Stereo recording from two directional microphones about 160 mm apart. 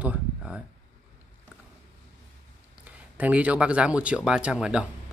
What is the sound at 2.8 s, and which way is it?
Speech, 10° right (ahead or behind).